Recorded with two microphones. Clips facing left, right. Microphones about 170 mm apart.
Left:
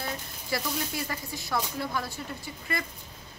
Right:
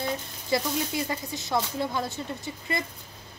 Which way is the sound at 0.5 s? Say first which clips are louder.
Right 5 dB; 20° right (ahead or behind).